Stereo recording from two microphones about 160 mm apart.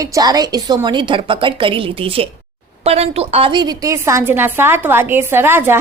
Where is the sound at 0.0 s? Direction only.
25° right (ahead or behind).